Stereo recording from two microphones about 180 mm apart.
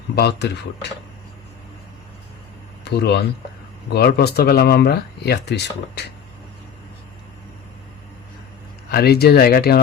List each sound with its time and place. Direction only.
0.2 s speech: 65° left (ahead or behind)
2.8 s speech: 70° left (ahead or behind)
8.9 s speech: 60° left (ahead or behind)